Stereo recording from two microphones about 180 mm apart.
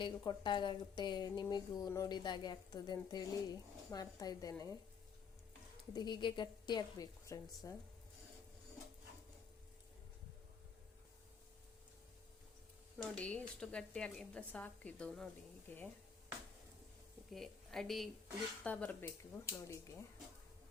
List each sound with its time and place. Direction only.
0.0 s a woman's voice: 25° left (ahead or behind)
5.9 s a woman's voice: 25° left (ahead or behind)
13.0 s a woman's voice: 5° left (ahead or behind)
17.3 s a woman's voice: centre (ahead or behind)